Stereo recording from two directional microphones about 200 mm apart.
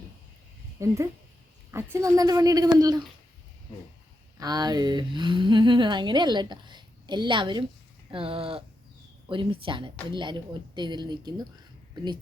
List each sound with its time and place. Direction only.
0.8 s a woman's voice: 15° right (ahead or behind)
4.4 s speech: 20° right (ahead or behind)